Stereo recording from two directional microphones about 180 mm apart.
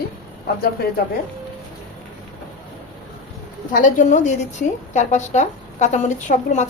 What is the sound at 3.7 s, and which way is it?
A woman's voice, 45° left (ahead or behind).